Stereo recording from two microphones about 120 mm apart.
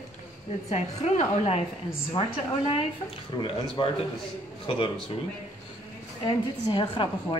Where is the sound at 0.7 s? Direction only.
65° left (ahead or behind).